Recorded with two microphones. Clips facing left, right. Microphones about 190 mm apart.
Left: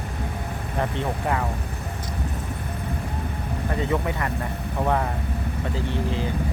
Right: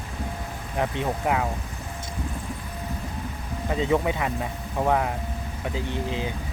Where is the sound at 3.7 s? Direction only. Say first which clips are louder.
Right 3 dB; 15° right (ahead or behind).